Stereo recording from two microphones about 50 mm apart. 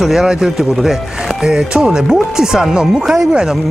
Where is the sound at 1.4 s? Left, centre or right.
Centre.